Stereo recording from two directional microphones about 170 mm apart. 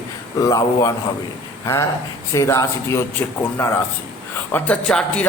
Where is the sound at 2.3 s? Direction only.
20° left (ahead or behind).